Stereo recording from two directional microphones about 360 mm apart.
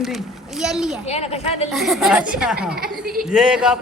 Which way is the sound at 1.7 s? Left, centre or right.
Centre.